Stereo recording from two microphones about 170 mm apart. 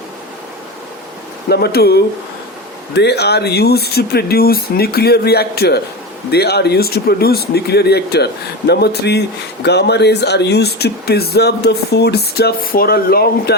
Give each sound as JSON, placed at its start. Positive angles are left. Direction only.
{"t": 1.5, "sound": "speech", "side_deg": 70}
{"t": 2.9, "sound": "speech", "side_deg": 80}